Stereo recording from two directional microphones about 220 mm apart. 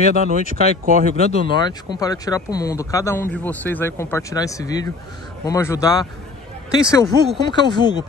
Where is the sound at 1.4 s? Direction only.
20° left (ahead or behind).